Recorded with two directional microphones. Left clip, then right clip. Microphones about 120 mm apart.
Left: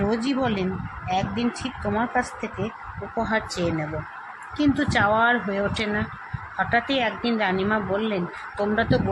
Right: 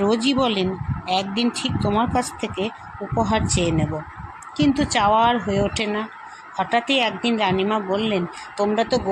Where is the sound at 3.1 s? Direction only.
40° right (ahead or behind).